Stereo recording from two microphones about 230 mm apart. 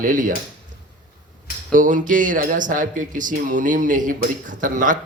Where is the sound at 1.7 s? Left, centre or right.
Right.